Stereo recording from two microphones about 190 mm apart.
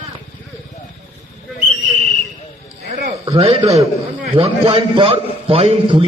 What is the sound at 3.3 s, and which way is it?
A man's voice, 30° right (ahead or behind).